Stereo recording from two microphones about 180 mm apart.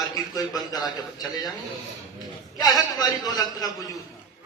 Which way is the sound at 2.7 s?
20° left (ahead or behind).